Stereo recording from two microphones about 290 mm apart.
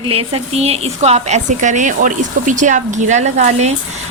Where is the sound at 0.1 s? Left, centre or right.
Centre.